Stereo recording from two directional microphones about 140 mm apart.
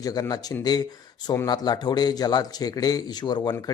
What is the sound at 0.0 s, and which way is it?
Speech, 25° left (ahead or behind).